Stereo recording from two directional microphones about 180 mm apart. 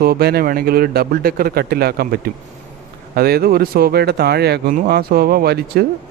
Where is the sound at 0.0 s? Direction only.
60° right (ahead or behind).